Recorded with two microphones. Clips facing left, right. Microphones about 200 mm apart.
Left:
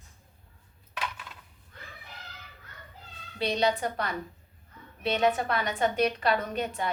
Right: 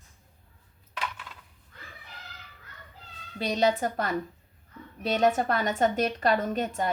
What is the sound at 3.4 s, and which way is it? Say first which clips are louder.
A woman's voice: right 2 dB; 45° right (ahead or behind).